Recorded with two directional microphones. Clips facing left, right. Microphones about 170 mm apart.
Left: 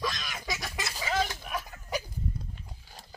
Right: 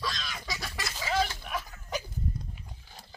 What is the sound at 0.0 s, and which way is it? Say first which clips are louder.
Fowl: left 2 dB; 15° left (ahead or behind).